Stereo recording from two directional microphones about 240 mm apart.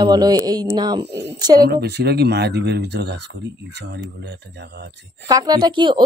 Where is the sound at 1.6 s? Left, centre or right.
Right.